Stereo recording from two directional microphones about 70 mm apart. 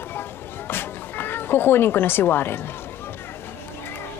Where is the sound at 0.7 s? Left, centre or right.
Left.